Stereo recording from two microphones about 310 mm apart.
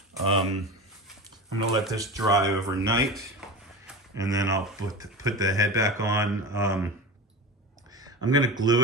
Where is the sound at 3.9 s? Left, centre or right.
Centre.